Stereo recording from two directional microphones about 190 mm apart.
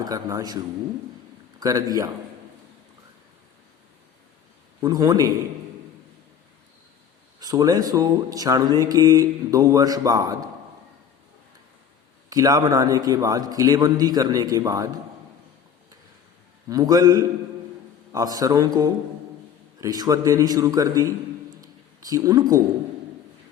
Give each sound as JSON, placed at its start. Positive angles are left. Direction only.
{"t": 0.0, "sound": "a man's voice", "side_deg": -20}
{"t": 4.8, "sound": "speech", "side_deg": -20}
{"t": 7.3, "sound": "speech", "side_deg": -20}
{"t": 12.3, "sound": "speech", "side_deg": -20}
{"t": 16.6, "sound": "speech", "side_deg": -20}
{"t": 21.5, "sound": "a sound", "side_deg": -20}